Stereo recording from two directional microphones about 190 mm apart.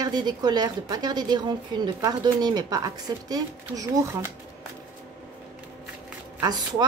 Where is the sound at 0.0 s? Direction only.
20° right (ahead or behind).